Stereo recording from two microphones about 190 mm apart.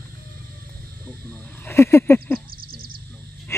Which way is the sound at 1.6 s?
15° left (ahead or behind).